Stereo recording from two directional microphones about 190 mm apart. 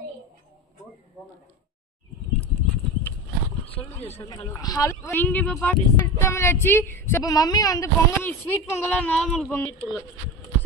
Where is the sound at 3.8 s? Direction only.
20° left (ahead or behind); by 9.5 s 5° left (ahead or behind).